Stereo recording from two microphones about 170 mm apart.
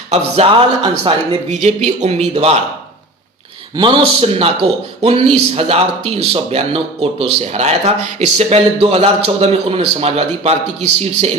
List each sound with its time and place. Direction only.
0.1 s a man's voice: 40° right (ahead or behind)
3.8 s a man's voice: 30° right (ahead or behind)